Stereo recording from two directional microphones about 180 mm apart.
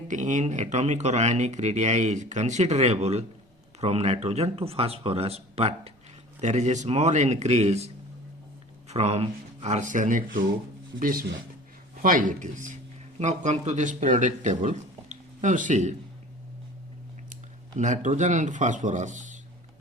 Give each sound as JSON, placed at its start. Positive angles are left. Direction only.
{"t": 0.1, "sound": "speech", "side_deg": -45}
{"t": 8.9, "sound": "speech", "side_deg": -35}
{"t": 17.7, "sound": "speech", "side_deg": -40}